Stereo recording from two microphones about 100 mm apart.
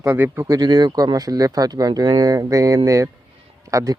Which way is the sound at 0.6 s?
45° right (ahead or behind).